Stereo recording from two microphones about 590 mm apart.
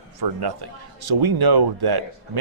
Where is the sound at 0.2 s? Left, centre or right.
Right.